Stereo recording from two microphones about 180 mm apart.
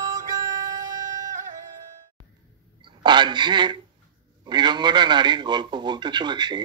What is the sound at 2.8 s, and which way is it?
A woman's voice, 25° right (ahead or behind).